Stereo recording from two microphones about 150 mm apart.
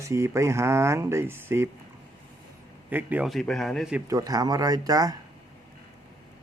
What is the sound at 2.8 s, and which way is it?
Speech, 10° right (ahead or behind).